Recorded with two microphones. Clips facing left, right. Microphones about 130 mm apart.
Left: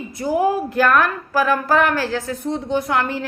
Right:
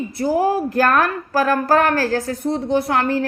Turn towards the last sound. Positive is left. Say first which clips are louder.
# right 2 dB
turn(degrees=-40)  # may be behind; listen again after turning